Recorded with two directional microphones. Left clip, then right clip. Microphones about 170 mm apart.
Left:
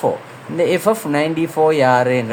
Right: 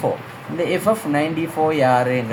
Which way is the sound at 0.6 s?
50° left (ahead or behind).